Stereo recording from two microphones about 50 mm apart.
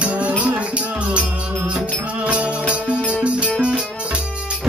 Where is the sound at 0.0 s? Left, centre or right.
Right.